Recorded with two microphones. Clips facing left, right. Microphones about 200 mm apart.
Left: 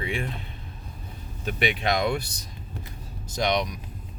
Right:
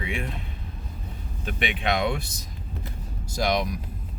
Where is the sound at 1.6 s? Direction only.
40° left (ahead or behind).